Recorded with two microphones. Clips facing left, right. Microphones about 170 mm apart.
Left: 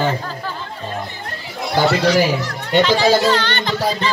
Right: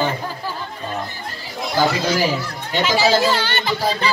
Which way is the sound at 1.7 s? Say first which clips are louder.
Left 4 dB; 70° left (ahead or behind).